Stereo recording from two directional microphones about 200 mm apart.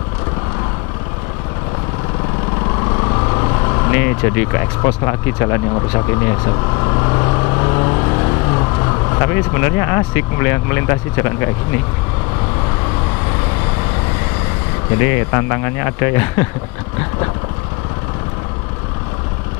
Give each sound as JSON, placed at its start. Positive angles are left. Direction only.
{"t": 2.8, "sound": "speech", "side_deg": 20}
{"t": 15.0, "sound": "speech", "side_deg": 10}